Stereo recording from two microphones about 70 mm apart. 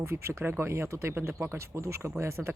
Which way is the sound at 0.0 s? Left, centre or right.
Right.